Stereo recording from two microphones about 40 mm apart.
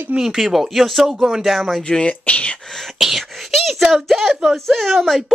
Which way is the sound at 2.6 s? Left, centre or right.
Centre.